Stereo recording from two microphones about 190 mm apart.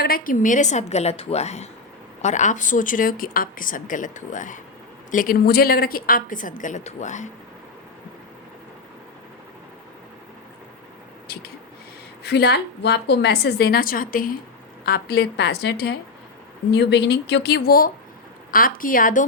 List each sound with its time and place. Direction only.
0.0 s a woman's voice: 50° left (ahead or behind)
12.2 s a woman's voice: 60° left (ahead or behind)
14.8 s a woman's voice: 55° left (ahead or behind)